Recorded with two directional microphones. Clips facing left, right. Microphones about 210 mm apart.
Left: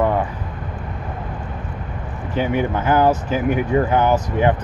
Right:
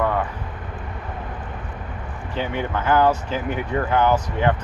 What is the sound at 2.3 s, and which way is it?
Speech, 10° left (ahead or behind).